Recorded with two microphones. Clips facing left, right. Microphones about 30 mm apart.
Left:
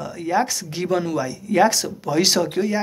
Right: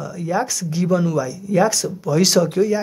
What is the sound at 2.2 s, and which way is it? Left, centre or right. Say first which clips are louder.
Speech: right 3 dB; centre.